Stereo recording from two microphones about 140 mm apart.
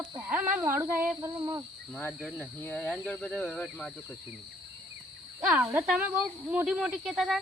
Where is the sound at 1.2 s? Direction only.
25° right (ahead or behind).